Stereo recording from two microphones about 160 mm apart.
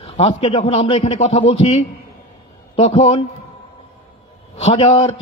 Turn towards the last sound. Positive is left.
turn(degrees=45)  # may be behind; listen again after turning